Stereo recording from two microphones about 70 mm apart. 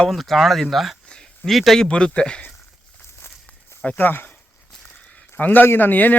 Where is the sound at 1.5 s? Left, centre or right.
Centre.